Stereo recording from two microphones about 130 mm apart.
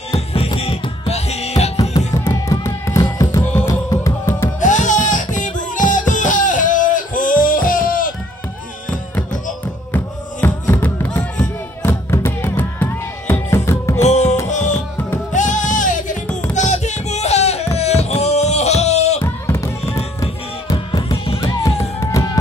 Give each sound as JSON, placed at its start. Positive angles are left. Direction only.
{"t": 0.1, "sound": "music", "side_deg": 50}
{"t": 1.8, "sound": "music", "side_deg": 25}
{"t": 4.6, "sound": "music", "side_deg": 75}
{"t": 9.9, "sound": "music", "side_deg": 15}
{"t": 14.0, "sound": "music", "side_deg": 60}
{"t": 16.3, "sound": "music", "side_deg": 10}
{"t": 16.5, "sound": "music", "side_deg": 65}
{"t": 17.7, "sound": "a sound", "side_deg": 55}
{"t": 19.2, "sound": "music", "side_deg": 20}
{"t": 20.2, "sound": "music", "side_deg": 30}